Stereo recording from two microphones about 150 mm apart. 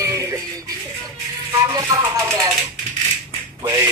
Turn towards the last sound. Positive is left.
turn(degrees=-20)  # may be behind; listen again after turning